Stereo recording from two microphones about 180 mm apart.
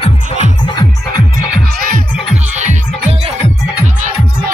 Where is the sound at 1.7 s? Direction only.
50° right (ahead or behind).